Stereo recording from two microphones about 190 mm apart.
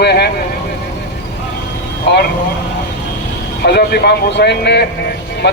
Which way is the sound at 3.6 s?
55° left (ahead or behind).